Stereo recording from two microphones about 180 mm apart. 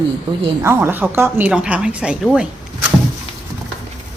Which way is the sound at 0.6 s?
15° right (ahead or behind).